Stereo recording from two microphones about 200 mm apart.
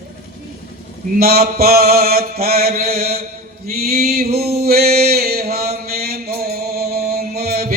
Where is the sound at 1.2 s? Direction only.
50° right (ahead or behind).